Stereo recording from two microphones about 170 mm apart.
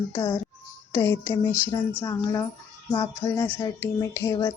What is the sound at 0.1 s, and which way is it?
A woman's voice, 20° left (ahead or behind).